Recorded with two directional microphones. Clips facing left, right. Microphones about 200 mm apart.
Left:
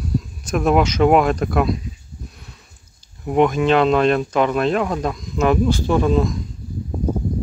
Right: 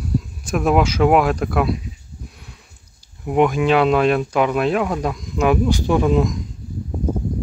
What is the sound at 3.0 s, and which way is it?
Speech, 10° right (ahead or behind).